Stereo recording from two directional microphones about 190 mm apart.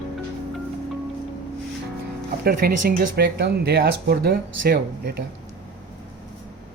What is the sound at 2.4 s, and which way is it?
Speech, 50° right (ahead or behind).